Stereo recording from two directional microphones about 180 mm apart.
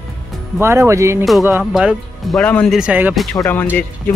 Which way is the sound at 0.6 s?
15° right (ahead or behind).